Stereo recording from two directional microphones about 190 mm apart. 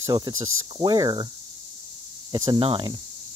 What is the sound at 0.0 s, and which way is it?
Speech, 20° right (ahead or behind).